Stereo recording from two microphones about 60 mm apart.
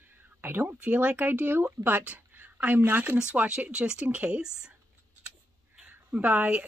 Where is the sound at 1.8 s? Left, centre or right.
Right.